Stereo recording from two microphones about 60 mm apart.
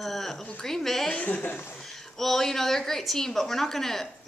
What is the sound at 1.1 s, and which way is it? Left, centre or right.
Speech, left.